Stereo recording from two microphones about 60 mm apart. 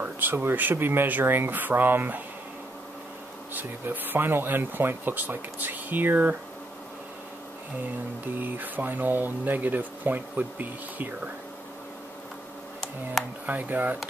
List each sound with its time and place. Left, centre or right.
0.0 s speech: right
3.5 s speech: right
8.4 s speech: right
13.2 s speech: centre
13.5 s speech: right